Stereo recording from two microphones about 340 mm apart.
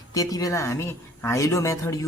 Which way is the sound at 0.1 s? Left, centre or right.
Centre.